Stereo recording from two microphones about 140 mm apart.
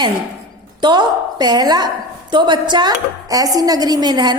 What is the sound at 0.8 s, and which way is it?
A woman's voice, 30° right (ahead or behind).